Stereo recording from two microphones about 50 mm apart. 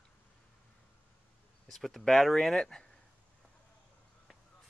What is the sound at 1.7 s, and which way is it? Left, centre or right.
Speech, centre.